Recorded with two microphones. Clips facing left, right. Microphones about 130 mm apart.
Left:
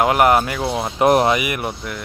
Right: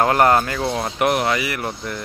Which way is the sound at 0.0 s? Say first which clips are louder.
Left 1 dB; 10° left (ahead or behind).